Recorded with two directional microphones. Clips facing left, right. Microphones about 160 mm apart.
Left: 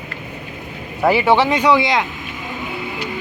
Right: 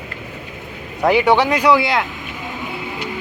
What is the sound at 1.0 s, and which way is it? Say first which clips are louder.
Speech: even; 5° left (ahead or behind).